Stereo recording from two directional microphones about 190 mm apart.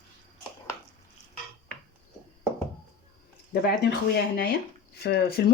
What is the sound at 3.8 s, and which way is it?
Speech, 55° left (ahead or behind).